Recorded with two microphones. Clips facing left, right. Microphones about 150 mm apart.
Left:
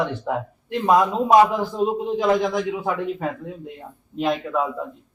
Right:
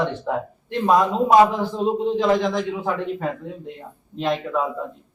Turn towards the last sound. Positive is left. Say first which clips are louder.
# even
turn(degrees=5)  # may be behind; listen again after turning